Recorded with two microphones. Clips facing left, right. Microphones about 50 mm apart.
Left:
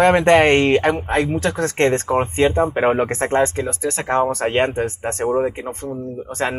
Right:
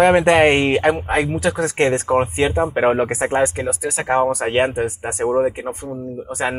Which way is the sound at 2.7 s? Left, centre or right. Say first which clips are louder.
Right 1 dB; centre.